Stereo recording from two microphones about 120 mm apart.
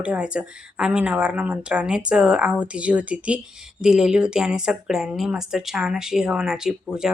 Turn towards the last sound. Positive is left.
turn(degrees=-5)  # may be behind; listen again after turning